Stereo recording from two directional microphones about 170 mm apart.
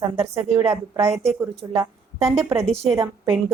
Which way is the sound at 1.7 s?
15° right (ahead or behind).